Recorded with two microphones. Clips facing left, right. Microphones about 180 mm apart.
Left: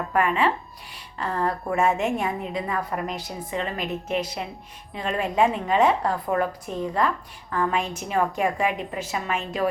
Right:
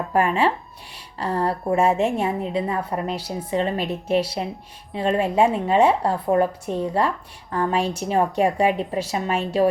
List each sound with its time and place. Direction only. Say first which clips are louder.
0.1 s a woman's voice: right 2 dB; 35° right (ahead or behind)